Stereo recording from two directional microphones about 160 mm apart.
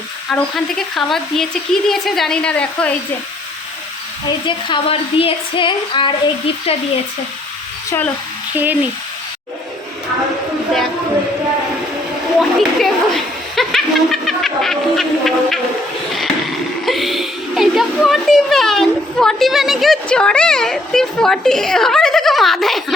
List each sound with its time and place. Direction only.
0.3 s speech: centre (ahead or behind)
4.3 s speech: 30° left (ahead or behind)
7.9 s speech: 10° left (ahead or behind)
8.5 s speech: 10° right (ahead or behind)
12.4 s a sound: centre (ahead or behind)
16.8 s a sound: centre (ahead or behind)